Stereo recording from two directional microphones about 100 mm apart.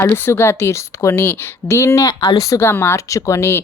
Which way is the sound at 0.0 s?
25° left (ahead or behind).